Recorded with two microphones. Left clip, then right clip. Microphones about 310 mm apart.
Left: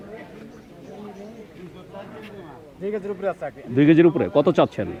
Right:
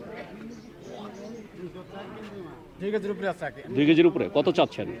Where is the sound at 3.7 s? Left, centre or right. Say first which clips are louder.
Left 4 dB; centre.